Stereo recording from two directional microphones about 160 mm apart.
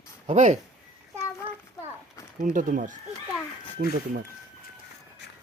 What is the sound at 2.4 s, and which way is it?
Speech, 55° right (ahead or behind).